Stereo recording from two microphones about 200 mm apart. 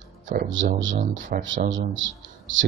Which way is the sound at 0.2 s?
40° right (ahead or behind).